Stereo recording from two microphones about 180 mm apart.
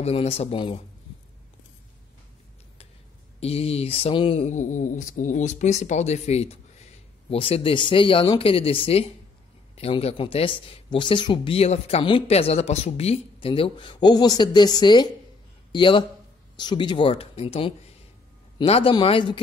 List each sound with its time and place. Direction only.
0.0 s speech: 35° left (ahead or behind)
3.3 s speech: 35° left (ahead or behind)